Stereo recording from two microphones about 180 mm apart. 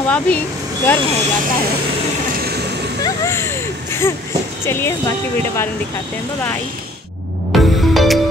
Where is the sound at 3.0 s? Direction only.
15° left (ahead or behind).